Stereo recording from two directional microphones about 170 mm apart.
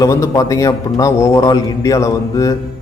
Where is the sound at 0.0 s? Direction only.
20° left (ahead or behind).